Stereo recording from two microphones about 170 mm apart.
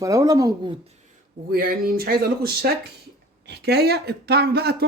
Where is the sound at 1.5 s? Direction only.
55° right (ahead or behind).